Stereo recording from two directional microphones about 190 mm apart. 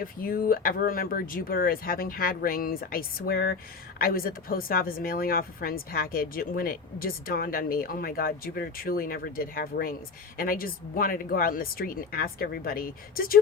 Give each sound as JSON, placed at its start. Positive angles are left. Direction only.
{"t": 0.0, "sound": "speech", "side_deg": 50}